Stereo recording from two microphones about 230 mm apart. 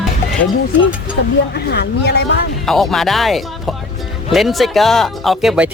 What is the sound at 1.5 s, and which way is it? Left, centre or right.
Speech, left.